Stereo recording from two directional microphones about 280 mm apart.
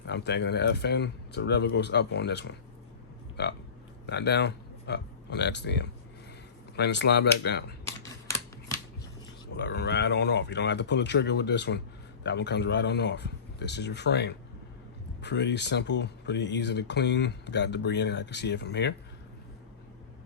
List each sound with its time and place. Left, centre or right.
0.0 s speech: left
4.0 s speech: left
9.6 s speech: left